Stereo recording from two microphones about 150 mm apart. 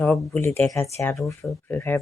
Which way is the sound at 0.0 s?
10° left (ahead or behind).